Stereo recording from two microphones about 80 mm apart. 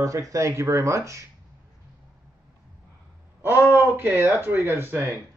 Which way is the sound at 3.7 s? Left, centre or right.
Right.